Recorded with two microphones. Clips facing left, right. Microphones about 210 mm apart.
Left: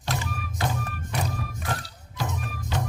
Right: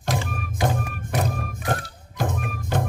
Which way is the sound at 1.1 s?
55° right (ahead or behind).